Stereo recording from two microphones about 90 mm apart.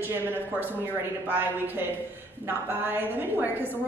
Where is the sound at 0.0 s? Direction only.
25° right (ahead or behind).